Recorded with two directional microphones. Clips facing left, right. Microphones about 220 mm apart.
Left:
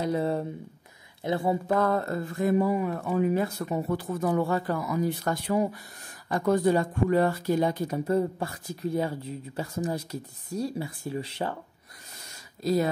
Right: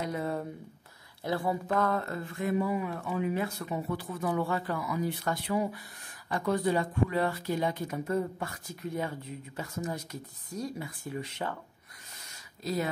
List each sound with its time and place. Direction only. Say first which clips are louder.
0.0 s speech: left 6 dB; 30° left (ahead or behind)
1.7 s speech: left 4 dB; 35° left (ahead or behind)
12.6 s speech: left 7 dB; 40° left (ahead or behind)